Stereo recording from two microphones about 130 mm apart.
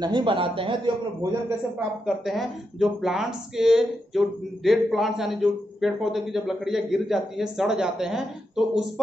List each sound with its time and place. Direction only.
0.0 s a man's voice: 35° right (ahead or behind)
2.0 s speech: centre (ahead or behind)